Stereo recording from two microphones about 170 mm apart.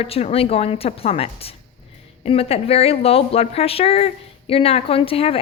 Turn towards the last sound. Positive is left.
turn(degrees=35)  # may be behind; listen again after turning